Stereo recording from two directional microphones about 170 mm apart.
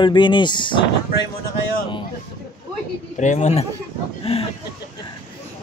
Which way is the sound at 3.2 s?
45° left (ahead or behind).